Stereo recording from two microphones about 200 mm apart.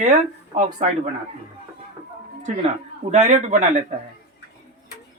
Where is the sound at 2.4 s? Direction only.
35° right (ahead or behind).